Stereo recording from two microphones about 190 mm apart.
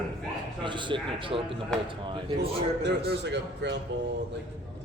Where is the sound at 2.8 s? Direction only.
65° right (ahead or behind).